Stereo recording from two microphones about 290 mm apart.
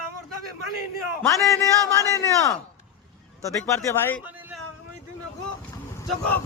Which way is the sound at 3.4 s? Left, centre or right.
Centre.